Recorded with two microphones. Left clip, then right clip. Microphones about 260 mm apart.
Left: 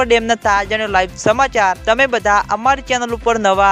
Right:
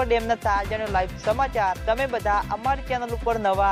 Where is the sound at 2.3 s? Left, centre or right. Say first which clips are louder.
Left 10 dB; left.